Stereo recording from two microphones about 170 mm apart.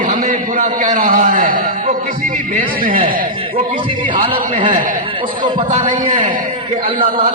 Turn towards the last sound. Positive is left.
turn(degrees=-45)  # may be behind; listen again after turning